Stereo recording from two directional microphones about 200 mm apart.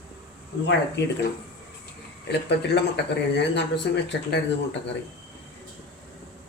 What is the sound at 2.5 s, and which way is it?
Speech, 55° left (ahead or behind).